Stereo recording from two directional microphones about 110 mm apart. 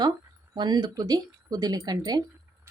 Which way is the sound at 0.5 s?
40° right (ahead or behind).